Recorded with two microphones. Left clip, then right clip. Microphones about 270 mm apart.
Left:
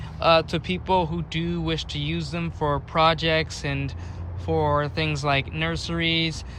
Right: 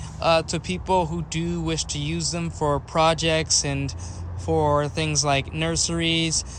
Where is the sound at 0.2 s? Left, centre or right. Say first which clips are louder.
Left 1 dB; centre.